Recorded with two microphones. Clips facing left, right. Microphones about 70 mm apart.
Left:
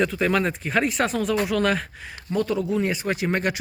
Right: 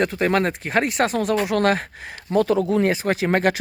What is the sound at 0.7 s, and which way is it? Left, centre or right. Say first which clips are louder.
Mantra: right 2 dB; right.